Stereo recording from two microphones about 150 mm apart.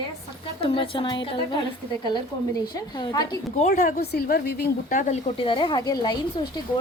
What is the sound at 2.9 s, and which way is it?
Speech, 25° left (ahead or behind).